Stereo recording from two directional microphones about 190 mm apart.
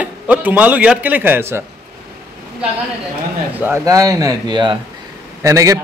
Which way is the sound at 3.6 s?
15° right (ahead or behind).